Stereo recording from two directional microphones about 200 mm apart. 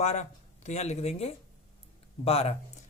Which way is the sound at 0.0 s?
35° left (ahead or behind).